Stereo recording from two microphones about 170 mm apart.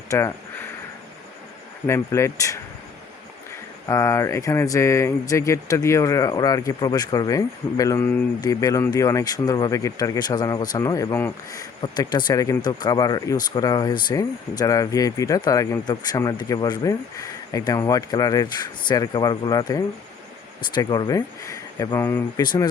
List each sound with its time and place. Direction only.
0.1 s speech: 15° left (ahead or behind)
1.9 s speech: 15° left (ahead or behind)
3.8 s speech: 20° left (ahead or behind)